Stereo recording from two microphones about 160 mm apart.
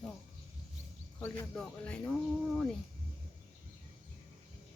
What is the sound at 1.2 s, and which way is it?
Speech, 10° left (ahead or behind).